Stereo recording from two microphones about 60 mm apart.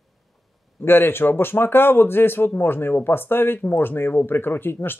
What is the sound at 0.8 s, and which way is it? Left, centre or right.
Speech, left.